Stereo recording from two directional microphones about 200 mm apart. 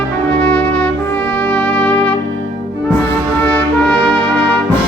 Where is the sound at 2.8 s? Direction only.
10° left (ahead or behind).